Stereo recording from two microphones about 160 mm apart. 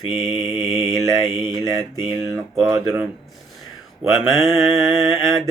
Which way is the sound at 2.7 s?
10° right (ahead or behind).